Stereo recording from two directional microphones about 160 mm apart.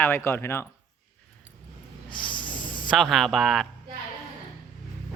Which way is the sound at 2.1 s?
30° left (ahead or behind).